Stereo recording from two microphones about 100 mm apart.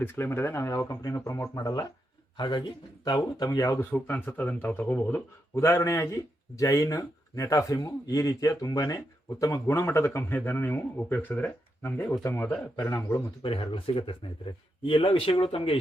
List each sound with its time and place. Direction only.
0.0 s speech: 25° left (ahead or behind)
2.4 s speech: 50° left (ahead or behind); by 3.8 s 35° left (ahead or behind)
3.9 s speech: 20° left (ahead or behind); by 9.0 s 35° left (ahead or behind)
9.6 s speech: 25° left (ahead or behind)
13.4 s speech: 60° left (ahead or behind)